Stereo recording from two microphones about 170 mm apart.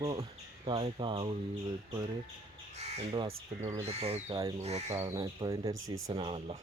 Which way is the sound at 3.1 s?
25° right (ahead or behind).